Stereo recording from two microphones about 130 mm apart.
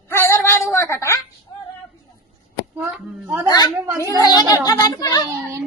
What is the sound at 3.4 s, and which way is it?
A child's voice, 30° left (ahead or behind).